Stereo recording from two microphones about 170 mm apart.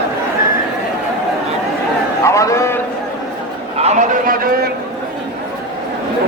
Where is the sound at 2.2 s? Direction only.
15° left (ahead or behind).